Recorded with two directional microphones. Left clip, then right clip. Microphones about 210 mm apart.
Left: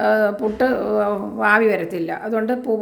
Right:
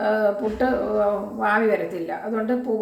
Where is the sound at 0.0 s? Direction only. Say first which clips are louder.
Left 4 dB; 50° left (ahead or behind).